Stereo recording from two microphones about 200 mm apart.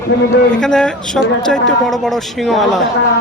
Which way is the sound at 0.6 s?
5° left (ahead or behind).